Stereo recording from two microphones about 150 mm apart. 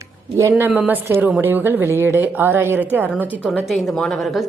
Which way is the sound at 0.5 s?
10° right (ahead or behind).